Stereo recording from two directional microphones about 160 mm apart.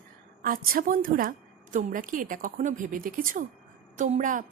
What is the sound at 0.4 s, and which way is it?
A woman's voice, 60° right (ahead or behind).